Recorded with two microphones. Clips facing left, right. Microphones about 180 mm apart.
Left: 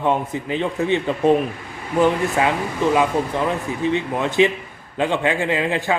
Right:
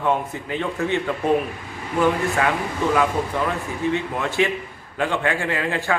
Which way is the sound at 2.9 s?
20° left (ahead or behind).